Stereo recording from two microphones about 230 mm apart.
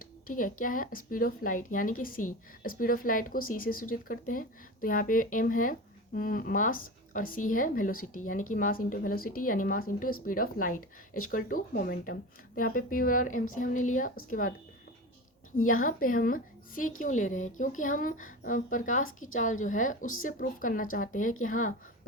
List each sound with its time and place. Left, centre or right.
0.3 s speech: left
15.5 s speech: left